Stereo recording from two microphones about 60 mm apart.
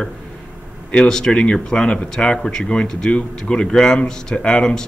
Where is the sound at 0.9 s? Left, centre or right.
Centre.